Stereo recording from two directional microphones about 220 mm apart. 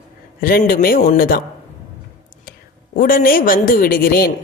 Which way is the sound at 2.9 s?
40° left (ahead or behind).